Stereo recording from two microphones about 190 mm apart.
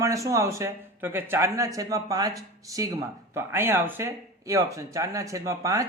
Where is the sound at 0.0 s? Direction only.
15° right (ahead or behind).